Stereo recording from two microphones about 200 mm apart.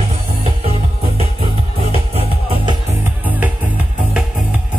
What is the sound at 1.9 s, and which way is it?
Music, 30° right (ahead or behind).